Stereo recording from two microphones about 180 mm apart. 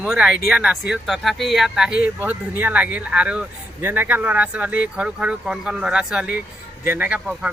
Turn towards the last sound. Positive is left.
turn(degrees=-5)  # may be behind; listen again after turning